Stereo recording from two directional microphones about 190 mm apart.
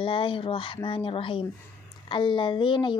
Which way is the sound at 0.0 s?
25° left (ahead or behind).